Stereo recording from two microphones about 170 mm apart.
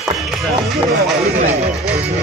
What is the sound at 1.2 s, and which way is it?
Music, 40° right (ahead or behind).